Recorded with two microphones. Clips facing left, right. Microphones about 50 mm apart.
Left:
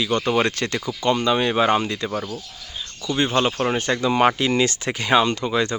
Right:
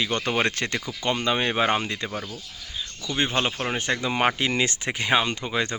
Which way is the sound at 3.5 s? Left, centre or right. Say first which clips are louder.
Left 5 dB; centre.